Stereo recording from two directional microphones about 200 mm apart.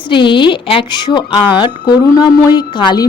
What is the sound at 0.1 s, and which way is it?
A woman's voice, 25° left (ahead or behind).